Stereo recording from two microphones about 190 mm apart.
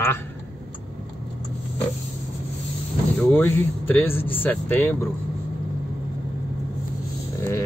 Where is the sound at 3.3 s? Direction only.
10° left (ahead or behind).